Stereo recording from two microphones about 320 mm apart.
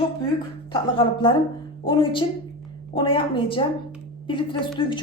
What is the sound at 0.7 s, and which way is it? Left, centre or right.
A woman's voice, centre.